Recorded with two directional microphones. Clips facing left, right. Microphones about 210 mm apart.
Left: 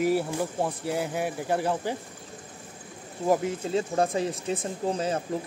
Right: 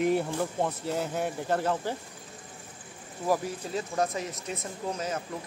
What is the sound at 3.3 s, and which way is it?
Speech, 25° left (ahead or behind).